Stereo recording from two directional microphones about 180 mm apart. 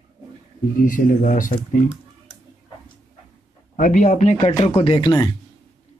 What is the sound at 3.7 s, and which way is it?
Speech, 40° left (ahead or behind).